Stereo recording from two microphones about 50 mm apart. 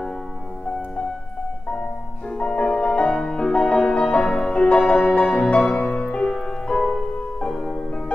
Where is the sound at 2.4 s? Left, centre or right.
Centre.